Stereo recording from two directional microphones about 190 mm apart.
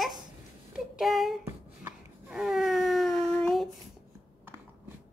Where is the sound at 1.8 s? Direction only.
5° right (ahead or behind).